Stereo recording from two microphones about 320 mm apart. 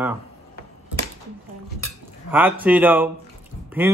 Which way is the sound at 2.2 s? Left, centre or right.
Centre.